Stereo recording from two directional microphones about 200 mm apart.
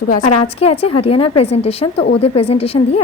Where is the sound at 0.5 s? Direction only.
30° left (ahead or behind).